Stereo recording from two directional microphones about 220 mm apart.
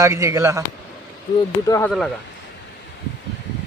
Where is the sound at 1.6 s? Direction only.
15° left (ahead or behind).